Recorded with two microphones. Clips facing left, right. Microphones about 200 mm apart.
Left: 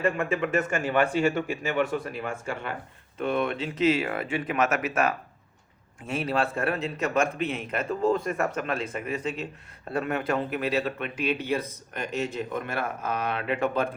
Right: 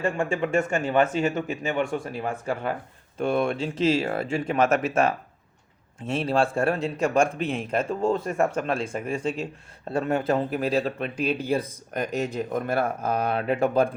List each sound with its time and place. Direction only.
0.0 s speech: 30° right (ahead or behind)
2.1 s speech: 35° right (ahead or behind)